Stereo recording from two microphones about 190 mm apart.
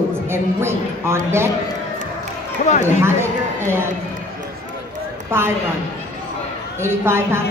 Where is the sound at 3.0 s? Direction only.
15° right (ahead or behind).